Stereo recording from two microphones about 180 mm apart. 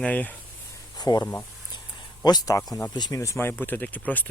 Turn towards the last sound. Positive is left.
turn(degrees=10)  # may be behind; listen again after turning